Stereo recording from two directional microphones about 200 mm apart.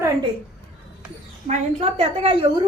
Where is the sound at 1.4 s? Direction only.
35° right (ahead or behind).